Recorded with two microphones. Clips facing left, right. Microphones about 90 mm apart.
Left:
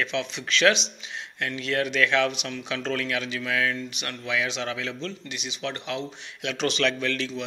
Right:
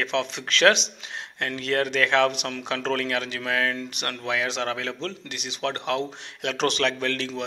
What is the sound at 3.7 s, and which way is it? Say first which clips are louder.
Speech: right 2 dB; 55° right (ahead or behind).